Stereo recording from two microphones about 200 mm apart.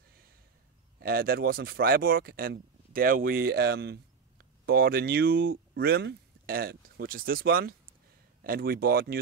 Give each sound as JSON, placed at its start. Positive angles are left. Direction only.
{"t": 0.9, "sound": "speech", "side_deg": -50}